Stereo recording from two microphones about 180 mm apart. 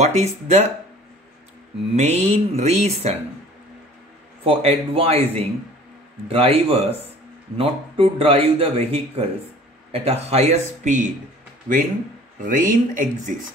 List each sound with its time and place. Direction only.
0.0 s a man's voice: 40° right (ahead or behind)
2.0 s a man's voice: 40° right (ahead or behind)
4.5 s a man's voice: 35° right (ahead or behind)
12.4 s speech: 45° right (ahead or behind)